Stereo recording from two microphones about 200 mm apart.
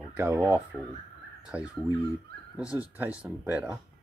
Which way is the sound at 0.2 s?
10° right (ahead or behind).